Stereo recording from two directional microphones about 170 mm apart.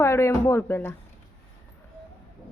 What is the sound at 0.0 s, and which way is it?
Speech, 15° left (ahead or behind).